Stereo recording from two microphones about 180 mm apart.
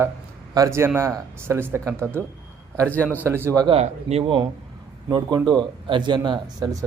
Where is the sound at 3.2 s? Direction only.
15° right (ahead or behind).